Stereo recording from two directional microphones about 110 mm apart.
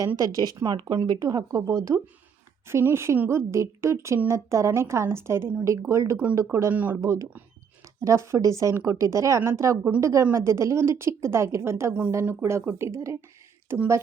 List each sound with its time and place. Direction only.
0.2 s a woman's voice: 35° right (ahead or behind)
6.7 s speech: 15° right (ahead or behind)
7.0 s a woman's voice: 30° right (ahead or behind)